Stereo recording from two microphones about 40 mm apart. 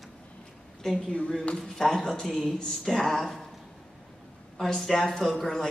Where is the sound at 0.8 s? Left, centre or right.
Centre.